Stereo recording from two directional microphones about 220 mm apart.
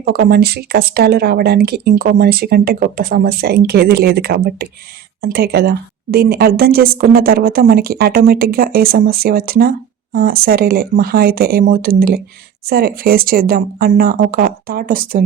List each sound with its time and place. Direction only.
0.0 s a woman's voice: 40° right (ahead or behind)